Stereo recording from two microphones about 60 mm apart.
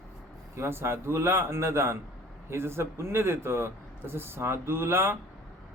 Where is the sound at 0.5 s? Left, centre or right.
Right.